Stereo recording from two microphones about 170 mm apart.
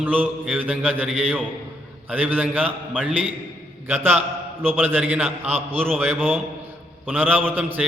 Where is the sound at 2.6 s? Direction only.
5° left (ahead or behind).